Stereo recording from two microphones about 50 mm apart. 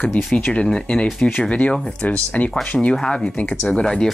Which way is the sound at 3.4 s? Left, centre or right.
Left.